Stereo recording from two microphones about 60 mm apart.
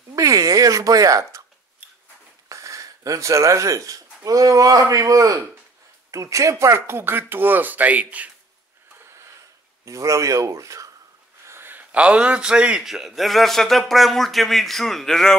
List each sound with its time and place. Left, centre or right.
0.1 s a sound: right
2.5 s speech: right
6.5 s speech: right
9.8 s speech: right
11.4 s a sound: right
11.7 s a man's voice: right
12.8 s speech: centre